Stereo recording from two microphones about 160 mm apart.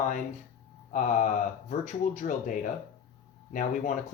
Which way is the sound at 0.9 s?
50° left (ahead or behind).